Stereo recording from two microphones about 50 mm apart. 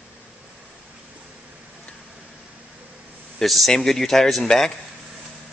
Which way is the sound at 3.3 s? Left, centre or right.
Centre.